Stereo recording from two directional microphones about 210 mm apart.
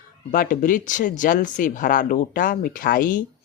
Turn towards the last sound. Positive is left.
turn(degrees=40)  # may be behind; listen again after turning